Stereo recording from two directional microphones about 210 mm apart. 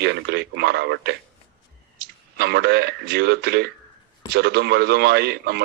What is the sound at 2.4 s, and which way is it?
Speech, 55° right (ahead or behind).